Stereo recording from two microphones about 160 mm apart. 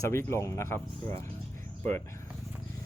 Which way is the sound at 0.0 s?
15° left (ahead or behind).